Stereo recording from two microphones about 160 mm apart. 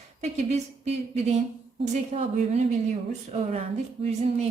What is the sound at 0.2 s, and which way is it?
Speech, 45° right (ahead or behind).